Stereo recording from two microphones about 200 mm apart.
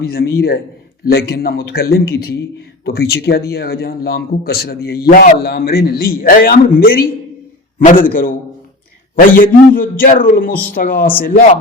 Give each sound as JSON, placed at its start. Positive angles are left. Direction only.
{"t": 0.0, "sound": "a man's voice", "side_deg": 50}